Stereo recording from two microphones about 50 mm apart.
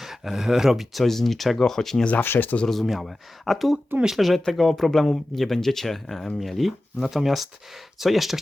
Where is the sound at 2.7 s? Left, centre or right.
Centre.